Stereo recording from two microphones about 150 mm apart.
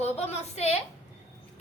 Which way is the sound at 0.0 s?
45° left (ahead or behind).